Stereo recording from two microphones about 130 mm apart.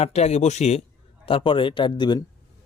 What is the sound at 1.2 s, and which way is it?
Speech, 40° left (ahead or behind).